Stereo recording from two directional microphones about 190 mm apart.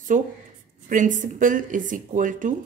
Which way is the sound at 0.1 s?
40° right (ahead or behind).